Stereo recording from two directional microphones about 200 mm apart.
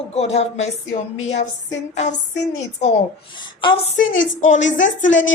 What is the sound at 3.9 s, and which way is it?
Speech, 40° left (ahead or behind).